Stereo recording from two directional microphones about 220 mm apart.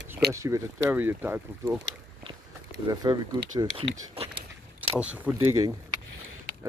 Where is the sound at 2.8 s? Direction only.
20° right (ahead or behind).